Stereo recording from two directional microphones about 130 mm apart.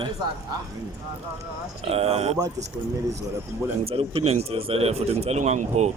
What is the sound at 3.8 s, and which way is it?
Speech, 45° right (ahead or behind).